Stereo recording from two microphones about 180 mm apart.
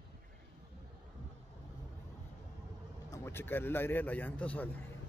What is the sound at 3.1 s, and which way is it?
A man's voice, 15° left (ahead or behind).